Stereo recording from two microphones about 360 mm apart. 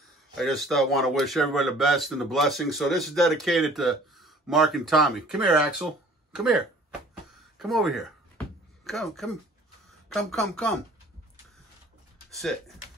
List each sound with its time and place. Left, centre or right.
0.4 s speech: centre
12.3 s speech: centre